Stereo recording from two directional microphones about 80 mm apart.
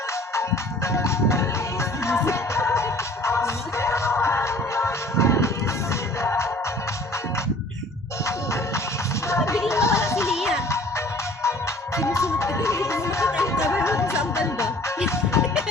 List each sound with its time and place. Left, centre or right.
0.3 s music: left
9.3 s music: left
10.2 s music: centre
11.9 s music: left